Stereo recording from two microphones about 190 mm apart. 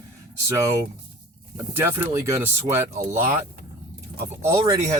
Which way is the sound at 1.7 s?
10° right (ahead or behind).